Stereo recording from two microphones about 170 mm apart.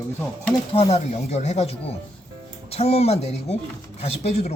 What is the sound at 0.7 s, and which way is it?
Speech, 35° left (ahead or behind).